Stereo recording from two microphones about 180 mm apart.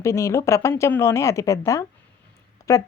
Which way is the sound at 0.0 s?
15° left (ahead or behind).